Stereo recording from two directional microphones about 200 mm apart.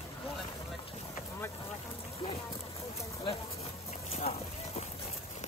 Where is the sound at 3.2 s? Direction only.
30° left (ahead or behind).